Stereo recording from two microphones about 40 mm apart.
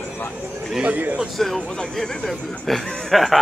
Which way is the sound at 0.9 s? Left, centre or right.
Right.